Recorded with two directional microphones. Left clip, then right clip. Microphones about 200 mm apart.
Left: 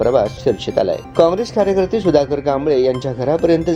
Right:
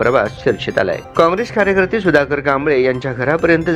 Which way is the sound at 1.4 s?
Centre (ahead or behind).